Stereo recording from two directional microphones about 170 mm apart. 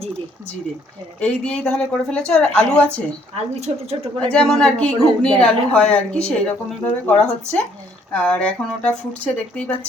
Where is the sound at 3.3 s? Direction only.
40° right (ahead or behind).